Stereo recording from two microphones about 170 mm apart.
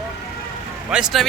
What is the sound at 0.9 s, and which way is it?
Speech, 5° right (ahead or behind).